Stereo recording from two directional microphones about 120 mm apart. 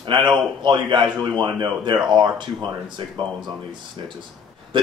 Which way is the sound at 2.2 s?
40° right (ahead or behind).